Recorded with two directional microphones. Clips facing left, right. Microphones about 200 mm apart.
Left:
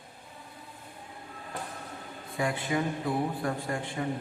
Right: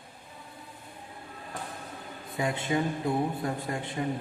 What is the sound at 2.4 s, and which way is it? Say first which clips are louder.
A man's voice: right 1 dB; 25° right (ahead or behind).